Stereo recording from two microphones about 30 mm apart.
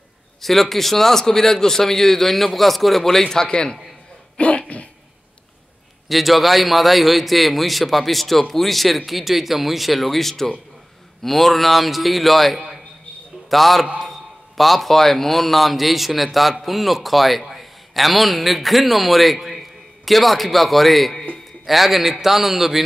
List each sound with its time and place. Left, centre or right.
0.4 s a man's voice: centre
3.4 s a man's voice: left
4.4 s a sound: left
6.0 s a man's voice: centre
12.5 s a sound: centre
13.5 s a man's voice: centre